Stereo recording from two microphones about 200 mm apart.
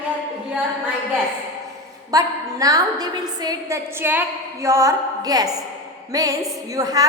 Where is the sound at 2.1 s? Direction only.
15° right (ahead or behind).